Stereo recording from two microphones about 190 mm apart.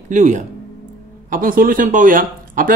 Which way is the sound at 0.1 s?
40° right (ahead or behind).